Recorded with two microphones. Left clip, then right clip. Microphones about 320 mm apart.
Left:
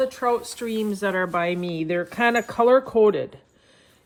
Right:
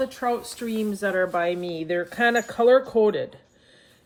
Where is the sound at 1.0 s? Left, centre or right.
Centre.